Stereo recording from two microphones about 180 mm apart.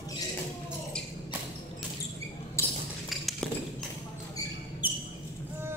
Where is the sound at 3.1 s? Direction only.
Centre (ahead or behind).